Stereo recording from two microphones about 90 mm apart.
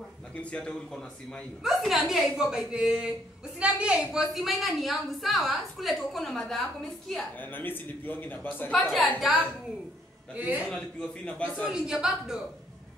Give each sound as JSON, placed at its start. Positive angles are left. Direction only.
{"t": 0.4, "sound": "a man's voice", "side_deg": 10}
{"t": 1.6, "sound": "a woman's voice", "side_deg": 0}
{"t": 7.3, "sound": "a man's voice", "side_deg": 20}
{"t": 8.7, "sound": "a woman's voice", "side_deg": 0}
{"t": 10.3, "sound": "a woman's voice", "side_deg": -20}
{"t": 10.7, "sound": "a man's voice", "side_deg": 10}
{"t": 11.6, "sound": "a woman's voice", "side_deg": -10}